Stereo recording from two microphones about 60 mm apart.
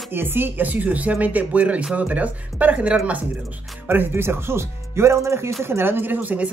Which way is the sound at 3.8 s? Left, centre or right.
Right.